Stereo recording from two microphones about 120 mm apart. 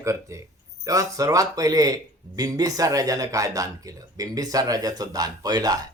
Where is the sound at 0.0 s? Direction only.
25° right (ahead or behind).